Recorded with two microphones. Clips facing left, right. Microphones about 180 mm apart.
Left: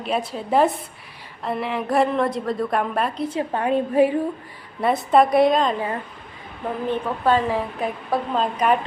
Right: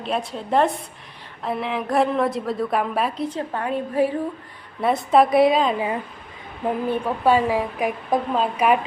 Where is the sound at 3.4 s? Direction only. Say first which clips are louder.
Left 7 dB; 20° left (ahead or behind).